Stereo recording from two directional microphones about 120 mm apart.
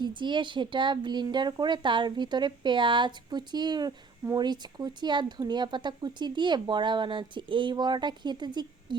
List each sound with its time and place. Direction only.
0.0 s speech: 40° right (ahead or behind)